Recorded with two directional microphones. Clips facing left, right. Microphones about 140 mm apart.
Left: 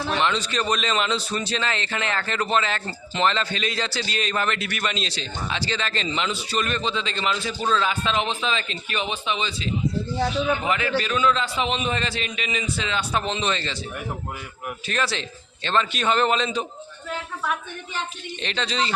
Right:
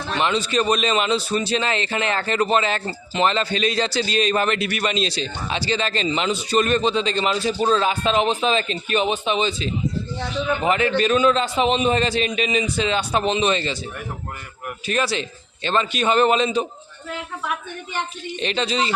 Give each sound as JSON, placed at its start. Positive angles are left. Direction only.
{"t": 0.2, "sound": "a man's voice", "side_deg": -10}
{"t": 1.6, "sound": "a man's voice", "side_deg": -20}
{"t": 6.1, "sound": "a man's voice", "side_deg": -35}
{"t": 10.7, "sound": "a man's voice", "side_deg": -30}
{"t": 12.4, "sound": "a man's voice", "side_deg": -20}
{"t": 14.8, "sound": "a man's voice", "side_deg": -5}
{"t": 18.4, "sound": "a man's voice", "side_deg": -10}